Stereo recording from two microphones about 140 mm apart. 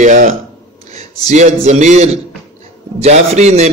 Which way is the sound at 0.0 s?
60° right (ahead or behind).